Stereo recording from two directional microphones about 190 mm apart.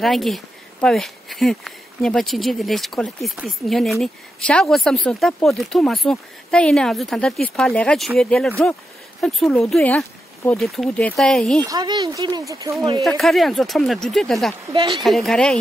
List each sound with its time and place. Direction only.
0.0 s speech: centre (ahead or behind)
11.6 s speech: 20° right (ahead or behind)
13.0 s speech: centre (ahead or behind)
14.7 s speech: 25° right (ahead or behind)
15.0 s speech: centre (ahead or behind)